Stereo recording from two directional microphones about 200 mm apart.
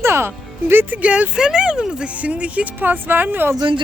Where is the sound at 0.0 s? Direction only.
10° right (ahead or behind).